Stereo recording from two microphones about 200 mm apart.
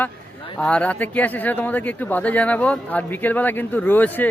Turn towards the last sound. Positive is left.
turn(degrees=10)  # may be behind; listen again after turning